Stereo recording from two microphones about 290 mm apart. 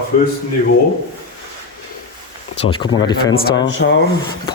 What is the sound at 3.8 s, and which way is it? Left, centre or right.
Speech, left.